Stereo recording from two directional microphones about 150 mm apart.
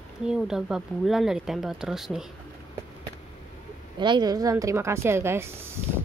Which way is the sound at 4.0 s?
30° right (ahead or behind).